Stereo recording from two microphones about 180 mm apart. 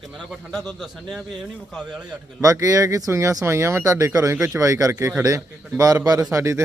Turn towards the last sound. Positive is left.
turn(degrees=-15)  # may be behind; listen again after turning